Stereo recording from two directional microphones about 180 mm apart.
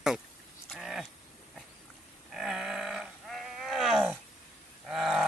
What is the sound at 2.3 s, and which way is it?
Groan, centre (ahead or behind).